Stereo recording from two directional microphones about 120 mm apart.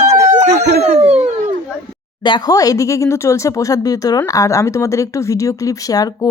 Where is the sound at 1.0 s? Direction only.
60° right (ahead or behind).